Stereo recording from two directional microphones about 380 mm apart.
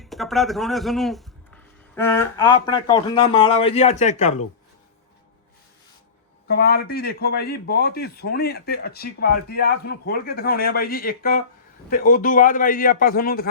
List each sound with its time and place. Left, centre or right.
0.0 s speech: centre
6.5 s a man's voice: left